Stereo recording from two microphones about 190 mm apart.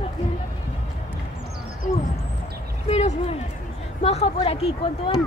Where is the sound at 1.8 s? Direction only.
40° left (ahead or behind).